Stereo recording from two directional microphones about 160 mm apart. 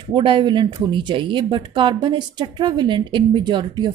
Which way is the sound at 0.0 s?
30° right (ahead or behind).